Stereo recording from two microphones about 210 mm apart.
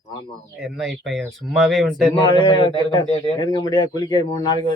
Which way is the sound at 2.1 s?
20° left (ahead or behind).